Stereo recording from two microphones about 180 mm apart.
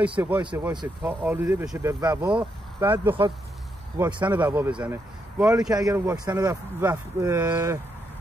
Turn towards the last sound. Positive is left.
turn(degrees=-10)  # may be behind; listen again after turning